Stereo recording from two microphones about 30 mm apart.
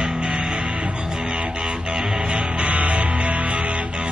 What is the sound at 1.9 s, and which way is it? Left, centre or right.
Speech, right.